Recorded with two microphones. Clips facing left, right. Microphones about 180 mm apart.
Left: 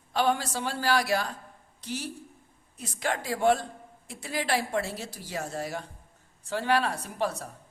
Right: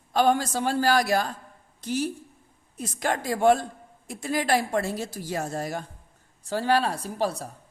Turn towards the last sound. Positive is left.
turn(degrees=-35)  # may be behind; listen again after turning